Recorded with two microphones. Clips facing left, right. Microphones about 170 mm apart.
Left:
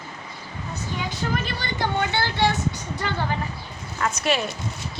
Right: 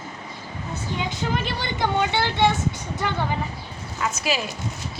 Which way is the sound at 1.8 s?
20° right (ahead or behind).